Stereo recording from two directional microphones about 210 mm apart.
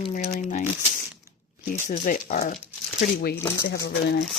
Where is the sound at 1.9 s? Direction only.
35° left (ahead or behind).